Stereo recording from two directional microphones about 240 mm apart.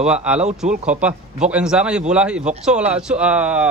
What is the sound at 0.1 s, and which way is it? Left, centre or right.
Speech, centre.